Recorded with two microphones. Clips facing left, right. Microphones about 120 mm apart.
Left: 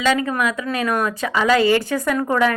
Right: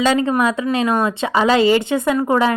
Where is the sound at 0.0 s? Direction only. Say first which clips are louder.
Right 3 dB; 30° right (ahead or behind).